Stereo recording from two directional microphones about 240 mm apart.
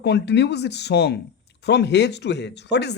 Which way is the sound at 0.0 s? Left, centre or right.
Left.